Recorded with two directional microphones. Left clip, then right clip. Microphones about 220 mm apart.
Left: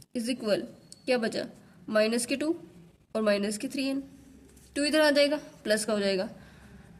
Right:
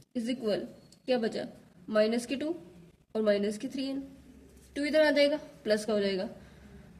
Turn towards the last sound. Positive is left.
turn(degrees=35)  # may be behind; listen again after turning